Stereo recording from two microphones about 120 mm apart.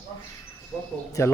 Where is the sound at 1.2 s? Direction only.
25° left (ahead or behind).